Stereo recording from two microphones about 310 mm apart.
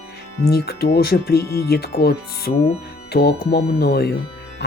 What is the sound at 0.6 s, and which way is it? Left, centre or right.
Speech, left.